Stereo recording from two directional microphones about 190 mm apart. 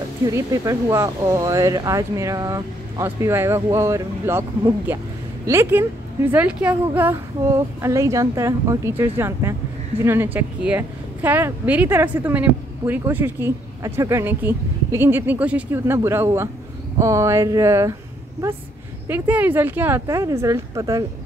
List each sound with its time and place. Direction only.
0.3 s speech: 15° right (ahead or behind)
19.0 s speech: 10° right (ahead or behind)